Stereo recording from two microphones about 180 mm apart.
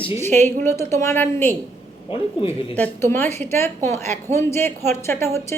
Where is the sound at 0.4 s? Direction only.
15° left (ahead or behind).